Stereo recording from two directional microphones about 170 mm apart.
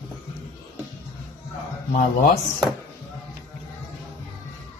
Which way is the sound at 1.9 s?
55° left (ahead or behind).